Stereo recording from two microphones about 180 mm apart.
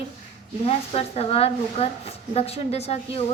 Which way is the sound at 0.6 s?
35° left (ahead or behind).